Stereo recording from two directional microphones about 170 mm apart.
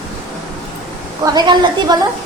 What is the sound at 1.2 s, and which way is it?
Speech, 25° right (ahead or behind).